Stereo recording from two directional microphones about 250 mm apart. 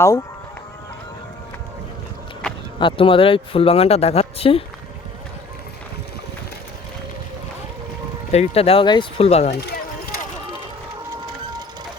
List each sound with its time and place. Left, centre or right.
0.0 s speech: centre
2.8 s speech: left
8.3 s speech: left
9.5 s speech: left